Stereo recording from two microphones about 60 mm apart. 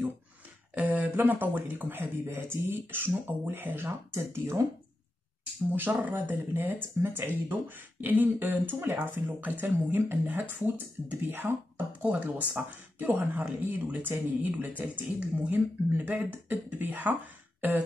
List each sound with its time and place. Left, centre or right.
0.7 s speech: right
5.8 s speech: right